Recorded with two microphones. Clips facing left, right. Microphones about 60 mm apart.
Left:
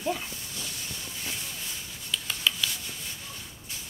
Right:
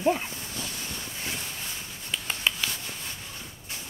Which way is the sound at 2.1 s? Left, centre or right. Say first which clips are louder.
Even; right.